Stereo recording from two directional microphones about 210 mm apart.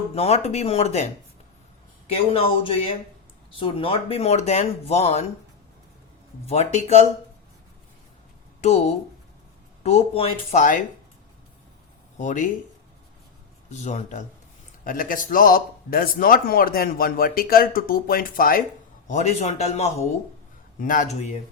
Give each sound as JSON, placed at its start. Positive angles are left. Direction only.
{"t": 0.1, "sound": "speech", "side_deg": 30}
{"t": 2.1, "sound": "speech", "side_deg": 25}
{"t": 6.5, "sound": "speech", "side_deg": 30}
{"t": 8.6, "sound": "speech", "side_deg": 30}
{"t": 12.1, "sound": "speech", "side_deg": 35}
{"t": 13.7, "sound": "speech", "side_deg": 35}